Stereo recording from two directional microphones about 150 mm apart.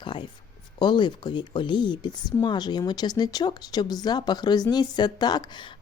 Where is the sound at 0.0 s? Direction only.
30° left (ahead or behind).